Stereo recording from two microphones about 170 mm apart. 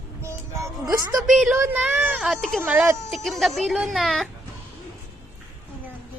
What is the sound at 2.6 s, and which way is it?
A woman's voice, 10° right (ahead or behind).